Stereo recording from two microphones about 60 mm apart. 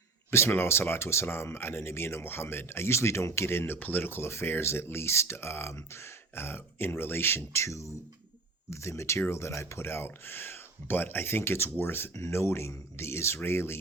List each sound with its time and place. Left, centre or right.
0.3 s speech: left
12.1 s speech: left